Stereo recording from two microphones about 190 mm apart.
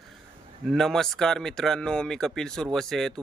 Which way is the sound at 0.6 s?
Centre (ahead or behind).